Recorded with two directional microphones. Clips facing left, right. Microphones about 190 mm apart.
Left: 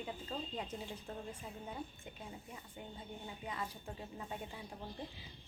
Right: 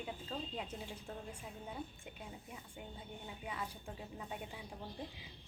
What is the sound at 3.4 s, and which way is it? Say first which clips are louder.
Speech: left 1 dB; 10° right (ahead or behind).